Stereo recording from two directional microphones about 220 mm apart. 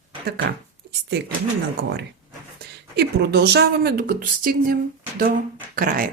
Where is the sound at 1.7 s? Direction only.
50° right (ahead or behind).